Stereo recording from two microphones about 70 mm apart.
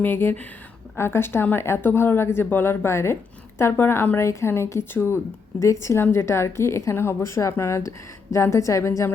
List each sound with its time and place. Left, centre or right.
0.0 s a woman's voice: left